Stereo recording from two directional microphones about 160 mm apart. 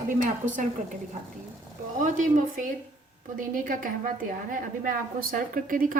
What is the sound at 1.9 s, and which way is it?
A woman's voice, 55° right (ahead or behind).